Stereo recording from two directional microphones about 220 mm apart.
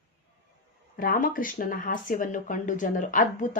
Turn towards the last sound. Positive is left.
turn(degrees=35)  # may be behind; listen again after turning